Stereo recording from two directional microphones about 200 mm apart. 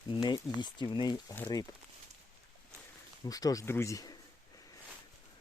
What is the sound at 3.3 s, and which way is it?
Speech, 20° left (ahead or behind).